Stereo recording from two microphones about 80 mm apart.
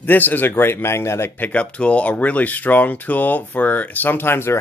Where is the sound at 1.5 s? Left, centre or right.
Centre.